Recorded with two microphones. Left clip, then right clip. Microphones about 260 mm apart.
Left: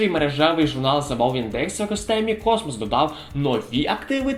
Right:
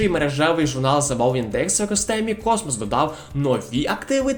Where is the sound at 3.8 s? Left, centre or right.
Right.